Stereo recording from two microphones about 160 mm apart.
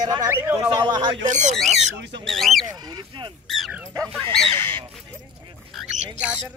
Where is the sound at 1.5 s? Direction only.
Centre (ahead or behind).